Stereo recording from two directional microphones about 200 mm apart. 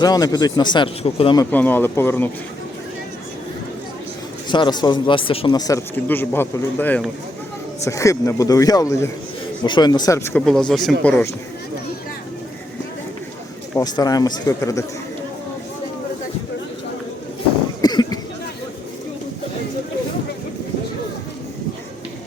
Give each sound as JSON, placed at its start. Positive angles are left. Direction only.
{"t": 0.0, "sound": "speech", "side_deg": 20}
{"t": 1.5, "sound": "a man's voice", "side_deg": 10}
{"t": 4.4, "sound": "a man's voice", "side_deg": 20}
{"t": 10.4, "sound": "a man's voice", "side_deg": 0}
{"t": 13.7, "sound": "speech", "side_deg": 20}
{"t": 17.8, "sound": "a sound", "side_deg": 20}